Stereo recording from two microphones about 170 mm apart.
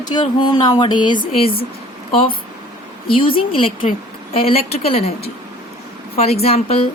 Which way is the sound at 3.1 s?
30° left (ahead or behind).